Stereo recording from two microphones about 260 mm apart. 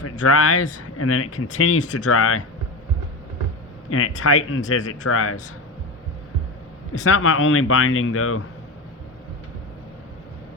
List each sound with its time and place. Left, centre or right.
0.0 s speech: left
3.8 s speech: left
7.0 s speech: left